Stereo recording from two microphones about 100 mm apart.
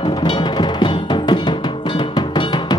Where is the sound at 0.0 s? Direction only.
55° left (ahead or behind).